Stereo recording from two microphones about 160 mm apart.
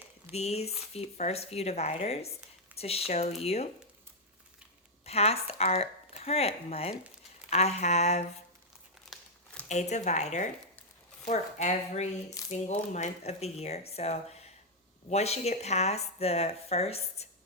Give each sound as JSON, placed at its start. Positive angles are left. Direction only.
{"t": 0.3, "sound": "speech", "side_deg": 40}
{"t": 5.0, "sound": "speech", "side_deg": 40}
{"t": 9.1, "sound": "crumpling", "side_deg": 0}
{"t": 9.6, "sound": "speech", "side_deg": 45}